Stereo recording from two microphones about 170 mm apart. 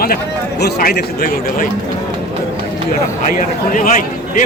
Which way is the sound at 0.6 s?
65° left (ahead or behind).